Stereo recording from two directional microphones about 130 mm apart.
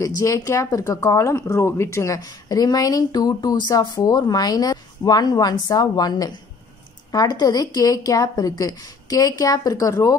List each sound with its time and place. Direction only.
0.0 s speech: 25° left (ahead or behind)